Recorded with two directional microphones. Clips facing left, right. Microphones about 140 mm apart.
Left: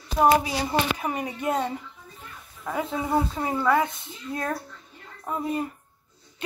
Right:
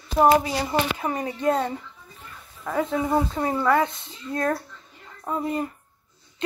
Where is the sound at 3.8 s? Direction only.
25° right (ahead or behind).